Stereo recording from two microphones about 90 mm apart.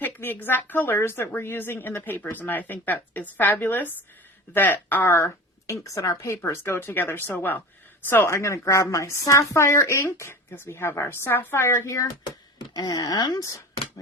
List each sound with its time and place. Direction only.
0.0 s a woman's voice: 20° left (ahead or behind)
5.6 s a woman's voice: 40° left (ahead or behind)
12.2 s speech: 50° left (ahead or behind)